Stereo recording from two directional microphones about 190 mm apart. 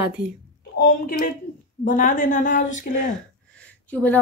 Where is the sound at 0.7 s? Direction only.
50° left (ahead or behind).